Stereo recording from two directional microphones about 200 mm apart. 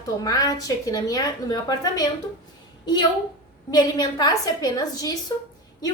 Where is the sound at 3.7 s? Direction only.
20° left (ahead or behind).